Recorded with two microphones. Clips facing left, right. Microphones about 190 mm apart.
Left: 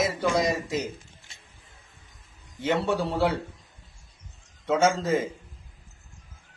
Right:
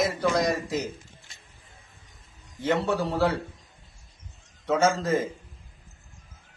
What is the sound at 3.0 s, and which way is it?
Speech, 5° left (ahead or behind).